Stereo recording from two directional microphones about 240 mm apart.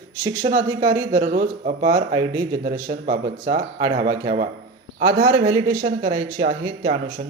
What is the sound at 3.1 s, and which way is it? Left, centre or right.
Speech, right.